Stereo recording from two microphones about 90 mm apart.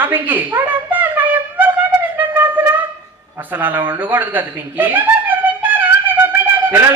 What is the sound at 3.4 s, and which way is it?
A man's voice, 20° right (ahead or behind).